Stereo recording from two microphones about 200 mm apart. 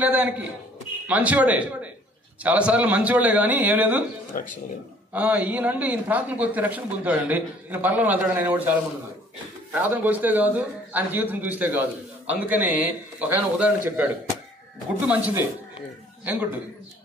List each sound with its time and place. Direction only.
0.0 s speech: 10° right (ahead or behind)
4.3 s speech: 40° left (ahead or behind)
5.1 s speech: 5° right (ahead or behind)